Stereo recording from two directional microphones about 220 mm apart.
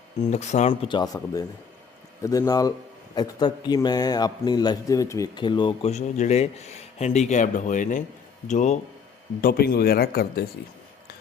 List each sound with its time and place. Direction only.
0.2 s a man's voice: 30° left (ahead or behind)
9.4 s speech: 40° left (ahead or behind)